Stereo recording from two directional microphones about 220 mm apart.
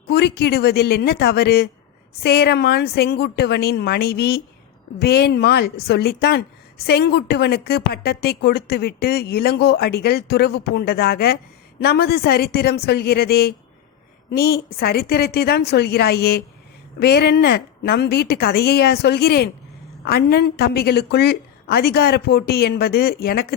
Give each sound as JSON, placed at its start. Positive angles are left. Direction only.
{"t": 0.1, "sound": "a woman's voice", "side_deg": 50}